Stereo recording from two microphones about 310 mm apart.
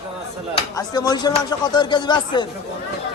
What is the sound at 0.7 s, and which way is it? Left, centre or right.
Speech, centre.